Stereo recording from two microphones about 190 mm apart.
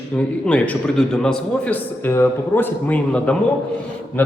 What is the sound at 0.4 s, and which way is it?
A man's voice, 5° left (ahead or behind).